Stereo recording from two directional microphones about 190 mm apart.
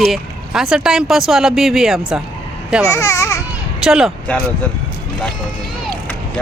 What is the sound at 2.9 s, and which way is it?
Babbling, 15° left (ahead or behind).